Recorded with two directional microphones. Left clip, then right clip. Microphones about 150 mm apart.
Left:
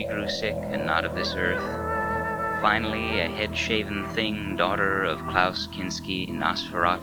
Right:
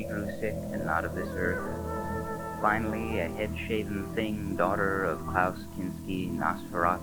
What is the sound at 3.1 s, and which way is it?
Speech, 45° right (ahead or behind).